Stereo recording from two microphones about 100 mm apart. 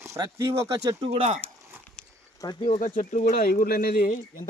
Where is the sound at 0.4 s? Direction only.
25° right (ahead or behind).